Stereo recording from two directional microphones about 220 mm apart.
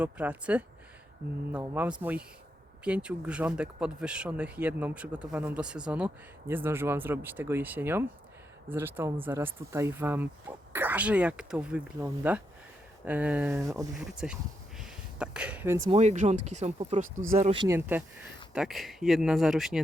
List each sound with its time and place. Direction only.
0.0 s speech: 5° right (ahead or behind)
14.0 s speech: 5° right (ahead or behind)
14.8 s a sound: 5° right (ahead or behind)
15.9 s speech: 30° right (ahead or behind)
17.7 s speech: 10° right (ahead or behind)